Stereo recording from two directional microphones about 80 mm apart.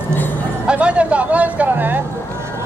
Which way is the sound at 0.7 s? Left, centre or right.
Centre.